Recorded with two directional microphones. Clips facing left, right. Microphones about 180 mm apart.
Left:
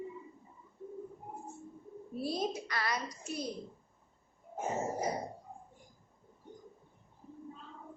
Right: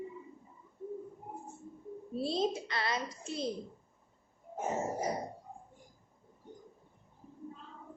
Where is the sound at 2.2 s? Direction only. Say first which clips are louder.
Right 3 dB; 25° right (ahead or behind).